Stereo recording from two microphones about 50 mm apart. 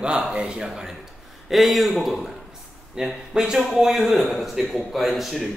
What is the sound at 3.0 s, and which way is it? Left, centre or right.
A man's voice, centre.